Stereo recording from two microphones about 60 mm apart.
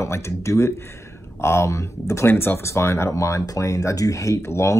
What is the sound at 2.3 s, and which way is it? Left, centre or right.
Speech, left.